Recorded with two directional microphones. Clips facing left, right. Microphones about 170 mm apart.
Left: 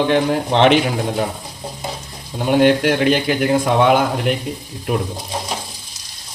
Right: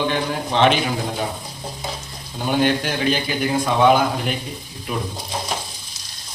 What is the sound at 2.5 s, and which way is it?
A man's voice, 70° left (ahead or behind).